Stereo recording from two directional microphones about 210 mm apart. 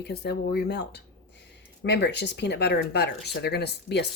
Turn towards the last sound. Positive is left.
turn(degrees=50)  # may be behind; listen again after turning